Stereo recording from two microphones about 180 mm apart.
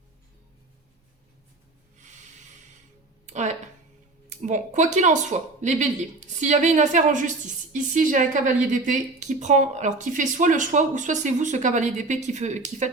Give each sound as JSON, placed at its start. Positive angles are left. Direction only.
{"t": 2.0, "sound": "snort", "side_deg": -40}
{"t": 3.2, "sound": "a sound", "side_deg": -40}
{"t": 4.3, "sound": "speech", "side_deg": -40}